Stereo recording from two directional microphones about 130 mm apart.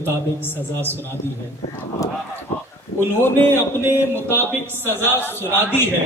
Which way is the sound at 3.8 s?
15° right (ahead or behind).